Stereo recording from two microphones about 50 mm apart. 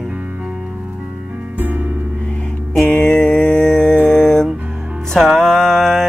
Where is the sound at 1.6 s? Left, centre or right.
Right.